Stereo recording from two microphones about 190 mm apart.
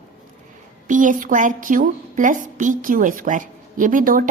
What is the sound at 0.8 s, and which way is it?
A woman's voice, 40° right (ahead or behind).